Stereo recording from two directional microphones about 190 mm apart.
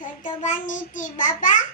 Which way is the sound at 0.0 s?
45° left (ahead or behind).